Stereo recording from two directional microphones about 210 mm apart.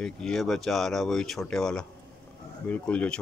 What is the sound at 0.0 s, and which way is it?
Speech, centre (ahead or behind).